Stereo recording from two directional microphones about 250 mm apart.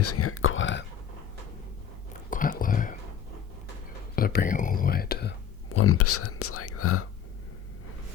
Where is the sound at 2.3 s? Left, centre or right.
Left.